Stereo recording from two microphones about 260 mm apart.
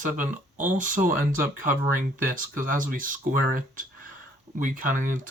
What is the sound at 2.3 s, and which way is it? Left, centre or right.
Speech, right.